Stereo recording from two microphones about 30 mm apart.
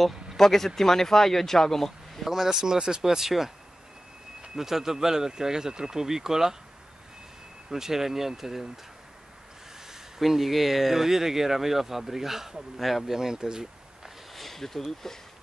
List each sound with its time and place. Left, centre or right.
0.4 s speech: centre
2.2 s speech: centre
4.6 s speech: centre
7.7 s speech: centre
9.8 s speech: centre
12.7 s speech: centre
13.0 s speech: centre
14.3 s speech: centre